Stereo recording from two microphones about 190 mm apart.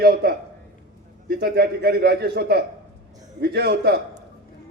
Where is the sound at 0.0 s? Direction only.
55° right (ahead or behind).